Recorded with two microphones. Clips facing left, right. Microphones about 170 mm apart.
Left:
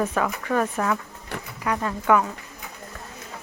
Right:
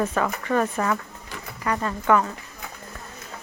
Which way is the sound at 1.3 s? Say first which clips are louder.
Left 5 dB; 65° left (ahead or behind).